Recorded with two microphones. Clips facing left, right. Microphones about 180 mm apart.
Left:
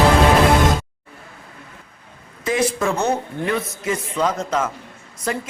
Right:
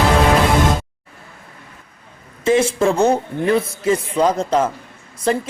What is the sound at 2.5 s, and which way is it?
A man's voice, 25° right (ahead or behind).